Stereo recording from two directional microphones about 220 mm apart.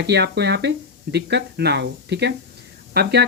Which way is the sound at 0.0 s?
50° right (ahead or behind).